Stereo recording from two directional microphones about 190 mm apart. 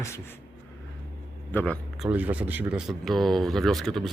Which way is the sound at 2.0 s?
10° right (ahead or behind).